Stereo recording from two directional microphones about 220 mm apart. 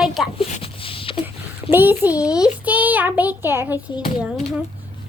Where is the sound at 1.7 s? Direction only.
10° right (ahead or behind).